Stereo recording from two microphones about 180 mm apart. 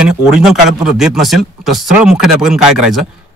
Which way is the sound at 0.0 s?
5° right (ahead or behind).